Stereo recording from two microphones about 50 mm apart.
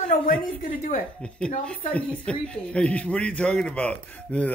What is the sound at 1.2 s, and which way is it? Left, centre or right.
Speech, centre.